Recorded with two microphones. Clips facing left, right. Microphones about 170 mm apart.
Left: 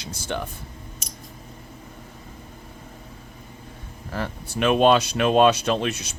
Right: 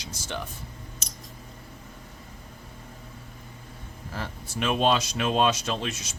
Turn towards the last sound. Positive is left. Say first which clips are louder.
# left 7 dB
turn(degrees=60)  # may be behind; listen again after turning